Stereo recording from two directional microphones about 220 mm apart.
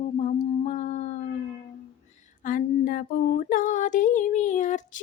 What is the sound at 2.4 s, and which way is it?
Speech, 35° left (ahead or behind).